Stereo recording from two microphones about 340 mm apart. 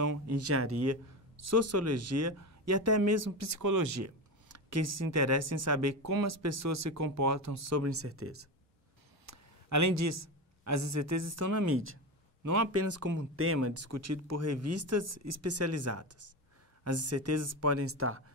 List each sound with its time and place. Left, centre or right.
0.3 s speech: right
9.2 s speech: right
12.8 s speech: right
13.6 s speech: right